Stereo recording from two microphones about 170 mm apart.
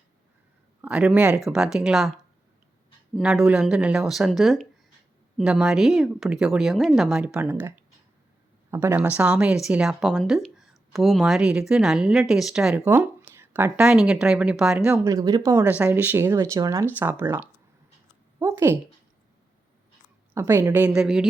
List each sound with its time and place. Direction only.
0.8 s speech: 5° right (ahead or behind)
3.2 s speech: 5° right (ahead or behind)
8.7 s speech: 15° right (ahead or behind)
15.0 s speech: 20° right (ahead or behind)
18.3 s a sound: 15° right (ahead or behind)
20.3 s speech: 15° right (ahead or behind)